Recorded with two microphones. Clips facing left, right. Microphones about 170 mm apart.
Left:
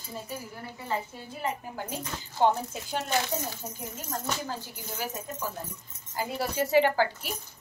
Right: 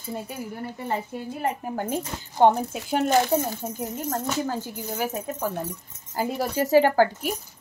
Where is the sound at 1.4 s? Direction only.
55° right (ahead or behind).